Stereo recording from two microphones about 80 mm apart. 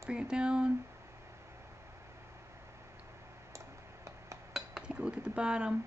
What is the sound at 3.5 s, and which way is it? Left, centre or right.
Tick-tock, right.